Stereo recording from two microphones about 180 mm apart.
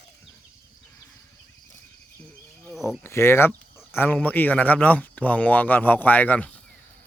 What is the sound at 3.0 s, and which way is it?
Speech, 15° left (ahead or behind).